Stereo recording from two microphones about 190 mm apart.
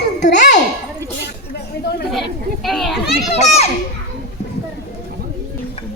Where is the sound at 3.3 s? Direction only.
35° left (ahead or behind).